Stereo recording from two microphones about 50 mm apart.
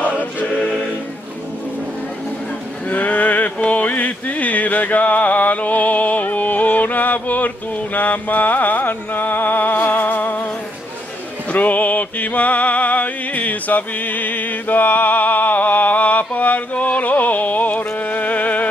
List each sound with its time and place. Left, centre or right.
0.0 s choir: left
2.9 s a sound: left
11.5 s music: left